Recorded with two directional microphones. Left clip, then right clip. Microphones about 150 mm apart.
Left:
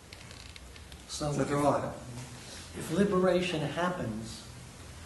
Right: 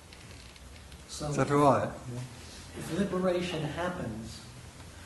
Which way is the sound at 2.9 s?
30° left (ahead or behind).